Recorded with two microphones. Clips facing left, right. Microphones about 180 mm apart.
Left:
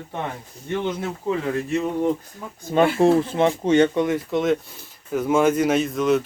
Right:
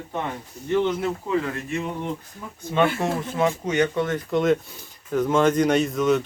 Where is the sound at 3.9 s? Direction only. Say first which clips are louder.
Left 3 dB; 15° left (ahead or behind).